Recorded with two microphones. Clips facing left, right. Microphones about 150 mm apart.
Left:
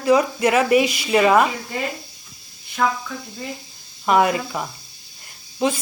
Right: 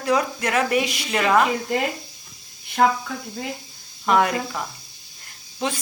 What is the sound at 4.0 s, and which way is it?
A woman's voice, 10° left (ahead or behind).